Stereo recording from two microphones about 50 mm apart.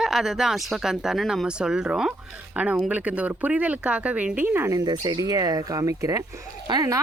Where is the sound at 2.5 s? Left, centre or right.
Right.